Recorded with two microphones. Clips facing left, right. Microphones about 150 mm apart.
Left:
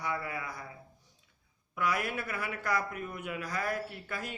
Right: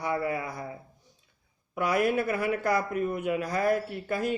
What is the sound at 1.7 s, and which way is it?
Speech, 25° right (ahead or behind).